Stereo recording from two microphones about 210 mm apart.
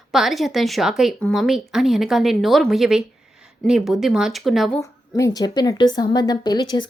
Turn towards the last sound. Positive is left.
turn(degrees=20)  # may be behind; listen again after turning